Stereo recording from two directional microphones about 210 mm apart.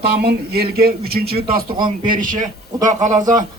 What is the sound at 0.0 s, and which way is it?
A man's voice, 50° right (ahead or behind).